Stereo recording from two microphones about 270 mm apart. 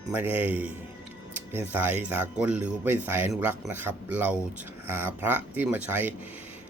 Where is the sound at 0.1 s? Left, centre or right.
Centre.